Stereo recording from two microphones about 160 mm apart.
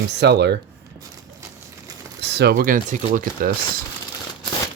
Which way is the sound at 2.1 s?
90° right.